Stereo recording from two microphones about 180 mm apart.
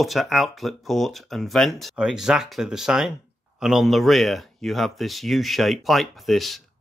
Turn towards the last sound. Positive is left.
turn(degrees=0)  # may be behind; listen again after turning